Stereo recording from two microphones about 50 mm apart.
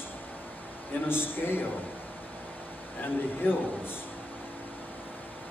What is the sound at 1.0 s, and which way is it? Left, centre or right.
Speech, left.